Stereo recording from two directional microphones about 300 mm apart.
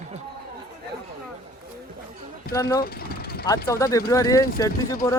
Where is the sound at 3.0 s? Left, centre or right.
Left.